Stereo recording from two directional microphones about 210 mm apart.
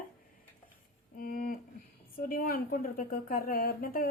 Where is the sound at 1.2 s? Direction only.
40° left (ahead or behind).